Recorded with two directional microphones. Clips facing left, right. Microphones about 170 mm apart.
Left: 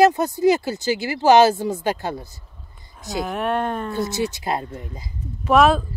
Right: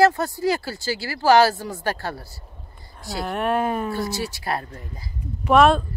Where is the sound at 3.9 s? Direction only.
20° left (ahead or behind).